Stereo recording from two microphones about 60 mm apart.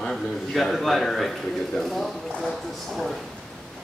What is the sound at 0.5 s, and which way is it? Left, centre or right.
Speech, centre.